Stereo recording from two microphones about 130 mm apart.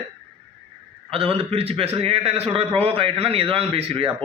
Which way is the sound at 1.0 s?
50° right (ahead or behind).